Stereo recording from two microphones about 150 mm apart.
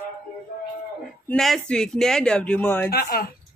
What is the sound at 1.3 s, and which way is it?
Speech, 5° left (ahead or behind).